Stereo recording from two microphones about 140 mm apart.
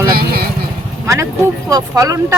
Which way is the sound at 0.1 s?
90° right.